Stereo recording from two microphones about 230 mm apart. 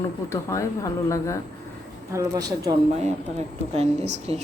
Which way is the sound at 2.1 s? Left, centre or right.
Centre.